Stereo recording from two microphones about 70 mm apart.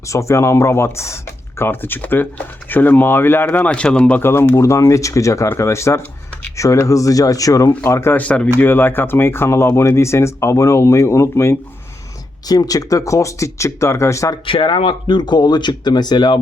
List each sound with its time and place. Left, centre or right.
0.1 s speech: left
3.4 s speech: centre
4.2 s speech: left
7.9 s speech: left
8.1 s speech: left
8.5 s speech: left
12.5 s speech: left
15.0 s speech: left